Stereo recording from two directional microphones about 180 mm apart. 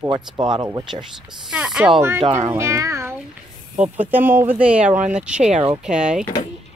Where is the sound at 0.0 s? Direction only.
25° right (ahead or behind).